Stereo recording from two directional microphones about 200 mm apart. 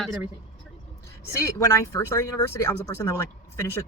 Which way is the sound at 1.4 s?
15° left (ahead or behind).